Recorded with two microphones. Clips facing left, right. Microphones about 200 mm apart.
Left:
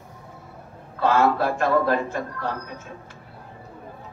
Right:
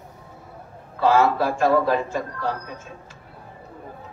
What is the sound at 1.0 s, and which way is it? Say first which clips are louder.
A man's voice: right 1 dB; 55° left (ahead or behind).